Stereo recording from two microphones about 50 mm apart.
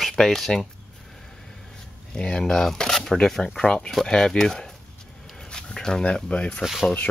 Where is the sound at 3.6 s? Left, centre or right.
Left.